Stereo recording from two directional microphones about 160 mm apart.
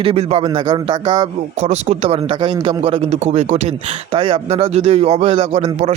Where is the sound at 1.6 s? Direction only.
45° right (ahead or behind).